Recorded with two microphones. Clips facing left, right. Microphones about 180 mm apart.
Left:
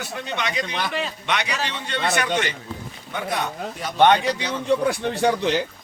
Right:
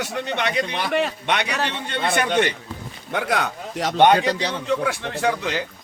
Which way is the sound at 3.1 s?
80° right.